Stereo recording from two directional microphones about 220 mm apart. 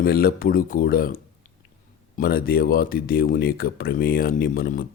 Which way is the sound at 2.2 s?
45° left (ahead or behind).